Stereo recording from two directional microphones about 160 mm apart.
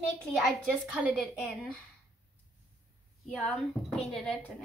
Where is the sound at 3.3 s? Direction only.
5° left (ahead or behind).